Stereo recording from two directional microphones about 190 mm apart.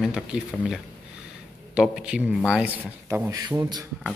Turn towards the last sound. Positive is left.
turn(degrees=-20)  # may be behind; listen again after turning